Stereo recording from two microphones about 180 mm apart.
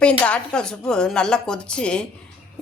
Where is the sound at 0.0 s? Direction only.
5° left (ahead or behind).